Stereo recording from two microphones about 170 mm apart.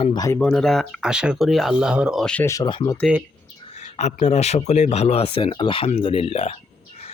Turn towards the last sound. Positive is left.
turn(degrees=35)  # may be behind; listen again after turning